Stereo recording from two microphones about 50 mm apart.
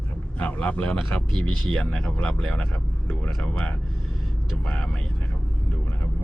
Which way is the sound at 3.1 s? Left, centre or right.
Centre.